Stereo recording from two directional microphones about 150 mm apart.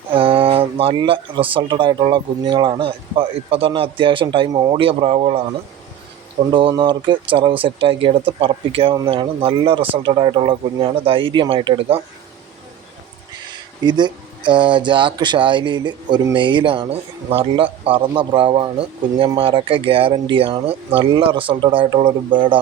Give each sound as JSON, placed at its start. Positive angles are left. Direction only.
{"t": 0.1, "sound": "speech", "side_deg": -35}
{"t": 6.5, "sound": "speech", "side_deg": -35}
{"t": 13.5, "sound": "speech", "side_deg": -30}